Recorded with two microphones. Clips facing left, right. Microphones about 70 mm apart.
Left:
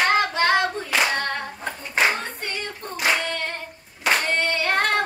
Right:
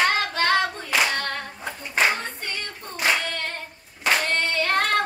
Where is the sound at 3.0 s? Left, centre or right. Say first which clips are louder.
Left 1 dB; centre.